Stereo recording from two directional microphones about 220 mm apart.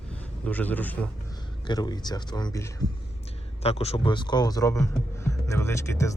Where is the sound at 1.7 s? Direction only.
20° left (ahead or behind).